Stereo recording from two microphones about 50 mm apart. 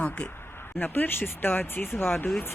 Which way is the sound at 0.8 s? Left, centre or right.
Left.